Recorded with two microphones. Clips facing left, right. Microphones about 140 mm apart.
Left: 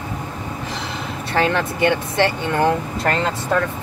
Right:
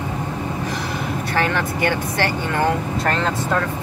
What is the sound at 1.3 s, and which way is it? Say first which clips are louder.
Speech: left 3 dB; 25° left (ahead or behind).